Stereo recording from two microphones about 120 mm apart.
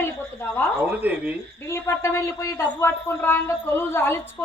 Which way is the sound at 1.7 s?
25° left (ahead or behind).